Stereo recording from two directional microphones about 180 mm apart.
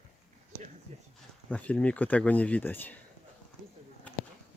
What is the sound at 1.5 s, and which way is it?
Speech, 10° left (ahead or behind).